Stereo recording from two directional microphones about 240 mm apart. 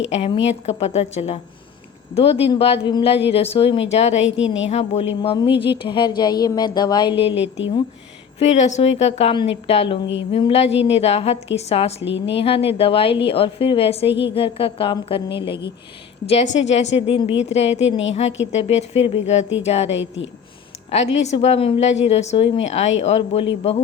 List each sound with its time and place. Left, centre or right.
0.1 s a woman's voice: left
12.0 s a woman's voice: left
12.4 s a woman's voice: left
14.1 s a woman's voice: left
14.3 s a woman's voice: left
16.6 s a woman's voice: left
20.0 s a woman's voice: left
20.9 s a woman's voice: left